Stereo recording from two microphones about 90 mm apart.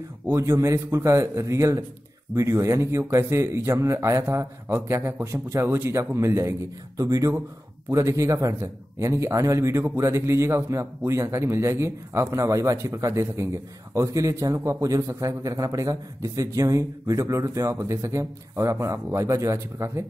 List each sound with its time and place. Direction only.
0.3 s speech: 30° right (ahead or behind)
4.6 s a man's voice: 20° right (ahead or behind)
4.9 s speech: 30° right (ahead or behind)